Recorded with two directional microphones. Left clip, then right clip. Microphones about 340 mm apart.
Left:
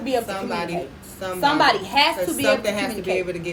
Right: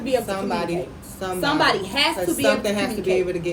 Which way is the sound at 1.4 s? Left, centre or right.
Centre.